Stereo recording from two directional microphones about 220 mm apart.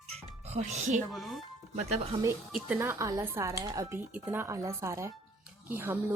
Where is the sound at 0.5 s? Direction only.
30° right (ahead or behind).